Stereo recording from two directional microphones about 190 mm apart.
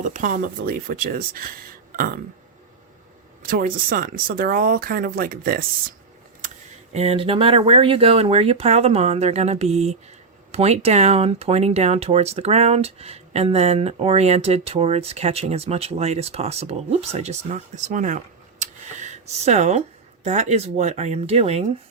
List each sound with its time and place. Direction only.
0.0 s speech: 45° right (ahead or behind)
3.4 s speech: 45° right (ahead or behind)
6.9 s speech: 35° right (ahead or behind)
18.6 s a sound: 40° right (ahead or behind)
20.2 s speech: 40° right (ahead or behind)